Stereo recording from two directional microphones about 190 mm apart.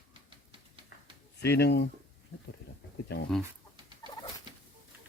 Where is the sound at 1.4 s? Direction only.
60° left (ahead or behind).